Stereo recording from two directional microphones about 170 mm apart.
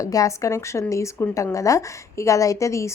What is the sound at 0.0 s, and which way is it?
A woman's voice, 20° left (ahead or behind).